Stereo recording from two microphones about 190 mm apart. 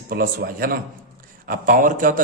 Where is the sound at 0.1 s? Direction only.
50° right (ahead or behind).